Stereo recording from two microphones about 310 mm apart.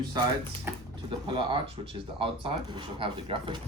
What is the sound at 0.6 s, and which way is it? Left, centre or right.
Speech, centre.